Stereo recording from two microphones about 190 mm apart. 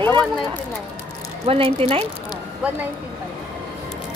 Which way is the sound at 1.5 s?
30° right (ahead or behind).